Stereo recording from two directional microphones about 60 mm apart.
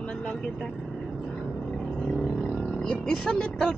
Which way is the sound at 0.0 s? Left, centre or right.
Centre.